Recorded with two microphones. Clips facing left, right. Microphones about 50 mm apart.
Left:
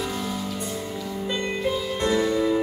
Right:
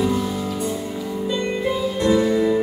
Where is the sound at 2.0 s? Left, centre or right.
Centre.